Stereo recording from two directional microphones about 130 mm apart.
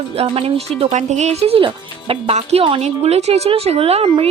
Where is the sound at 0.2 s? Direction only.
50° right (ahead or behind).